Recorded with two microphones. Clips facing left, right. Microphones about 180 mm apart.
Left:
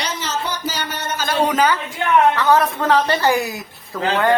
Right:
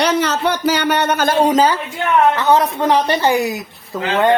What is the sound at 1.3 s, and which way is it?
Speech, 35° right (ahead or behind).